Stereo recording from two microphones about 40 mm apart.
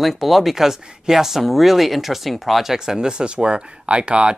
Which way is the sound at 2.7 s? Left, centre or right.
Centre.